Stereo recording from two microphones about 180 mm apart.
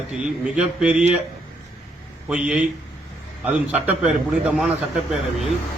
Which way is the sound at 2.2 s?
5° right (ahead or behind).